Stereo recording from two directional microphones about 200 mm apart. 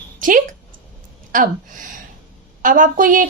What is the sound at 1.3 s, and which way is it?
A woman's voice, 40° right (ahead or behind).